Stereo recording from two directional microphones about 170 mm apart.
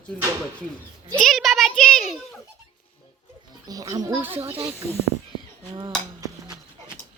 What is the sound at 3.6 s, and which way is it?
Speech, 20° right (ahead or behind).